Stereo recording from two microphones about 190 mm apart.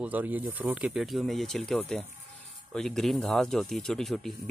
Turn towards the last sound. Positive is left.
turn(degrees=0)  # may be behind; listen again after turning